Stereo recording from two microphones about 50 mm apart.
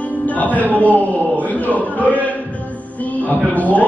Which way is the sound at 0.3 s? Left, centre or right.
Left.